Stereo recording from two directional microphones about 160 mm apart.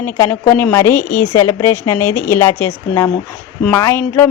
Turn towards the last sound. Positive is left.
turn(degrees=15)  # may be behind; listen again after turning